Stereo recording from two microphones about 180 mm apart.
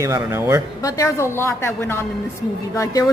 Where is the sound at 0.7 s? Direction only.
20° left (ahead or behind).